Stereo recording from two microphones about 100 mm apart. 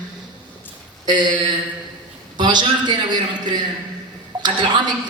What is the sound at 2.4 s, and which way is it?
A man's voice, 45° right (ahead or behind).